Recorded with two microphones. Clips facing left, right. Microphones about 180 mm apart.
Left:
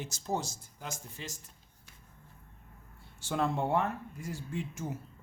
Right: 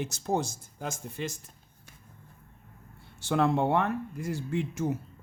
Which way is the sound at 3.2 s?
70° right (ahead or behind).